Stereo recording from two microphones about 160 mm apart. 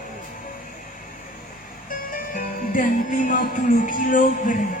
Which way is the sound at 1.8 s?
65° left (ahead or behind).